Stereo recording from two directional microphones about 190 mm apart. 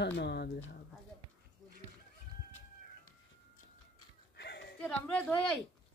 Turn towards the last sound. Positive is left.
turn(degrees=5)  # may be behind; listen again after turning